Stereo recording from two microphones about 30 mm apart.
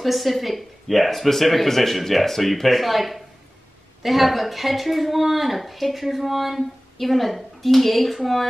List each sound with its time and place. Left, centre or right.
0.0 s speech: centre